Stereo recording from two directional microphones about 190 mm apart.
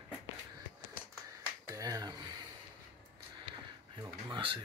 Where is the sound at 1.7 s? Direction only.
20° right (ahead or behind).